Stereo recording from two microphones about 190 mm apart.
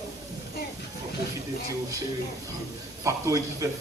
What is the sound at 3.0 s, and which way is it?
Speech, 15° right (ahead or behind).